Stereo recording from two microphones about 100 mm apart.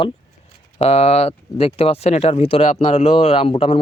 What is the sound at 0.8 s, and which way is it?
Speech, 90° left.